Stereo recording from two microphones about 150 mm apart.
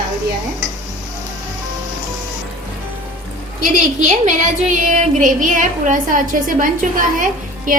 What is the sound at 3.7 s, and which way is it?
A woman's voice, 60° right (ahead or behind).